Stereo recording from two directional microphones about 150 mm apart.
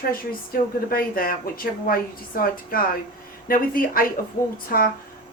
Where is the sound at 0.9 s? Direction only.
75° left (ahead or behind).